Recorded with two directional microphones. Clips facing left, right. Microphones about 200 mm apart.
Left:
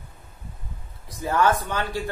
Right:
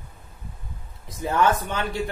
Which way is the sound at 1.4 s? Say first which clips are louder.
Even; 20° right (ahead or behind).